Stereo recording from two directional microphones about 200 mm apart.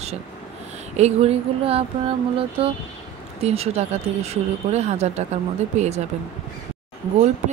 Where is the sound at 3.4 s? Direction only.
30° right (ahead or behind).